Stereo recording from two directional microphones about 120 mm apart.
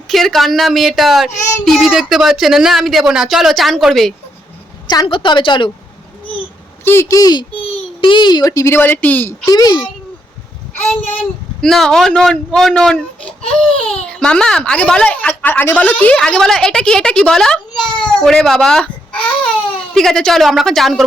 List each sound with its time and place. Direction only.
0.1 s speech: centre (ahead or behind)
4.9 s a woman's voice: 40° left (ahead or behind)
6.8 s speech: 20° left (ahead or behind)
9.5 s a child's voice: 35° left (ahead or behind)
11.6 s speech: centre (ahead or behind)